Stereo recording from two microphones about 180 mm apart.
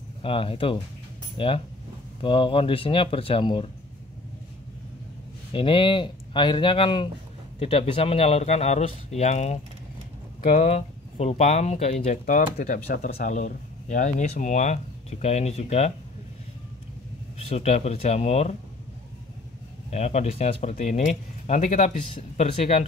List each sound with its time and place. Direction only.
0.2 s speech: 30° left (ahead or behind)
5.5 s speech: 30° left (ahead or behind)
17.4 s speech: 35° left (ahead or behind)
19.9 s speech: 40° left (ahead or behind)